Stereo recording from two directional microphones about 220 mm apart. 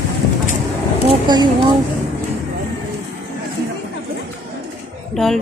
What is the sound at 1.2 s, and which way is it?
Speech, 20° right (ahead or behind).